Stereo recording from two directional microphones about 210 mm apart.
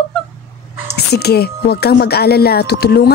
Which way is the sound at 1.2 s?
50° left (ahead or behind).